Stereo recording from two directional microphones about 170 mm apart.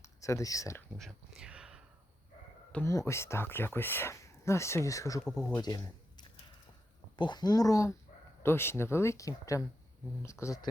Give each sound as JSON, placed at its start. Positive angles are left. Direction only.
{"t": 0.0, "sound": "speech", "side_deg": 15}
{"t": 0.9, "sound": "speech", "side_deg": 0}
{"t": 2.7, "sound": "speech", "side_deg": 20}
{"t": 5.2, "sound": "speech", "side_deg": 5}
{"t": 5.5, "sound": "speech", "side_deg": 25}